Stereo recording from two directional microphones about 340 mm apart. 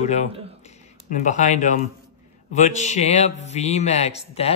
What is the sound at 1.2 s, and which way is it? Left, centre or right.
A man's voice, left.